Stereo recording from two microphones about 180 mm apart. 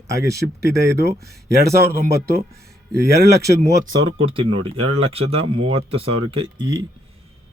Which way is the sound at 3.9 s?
30° right (ahead or behind).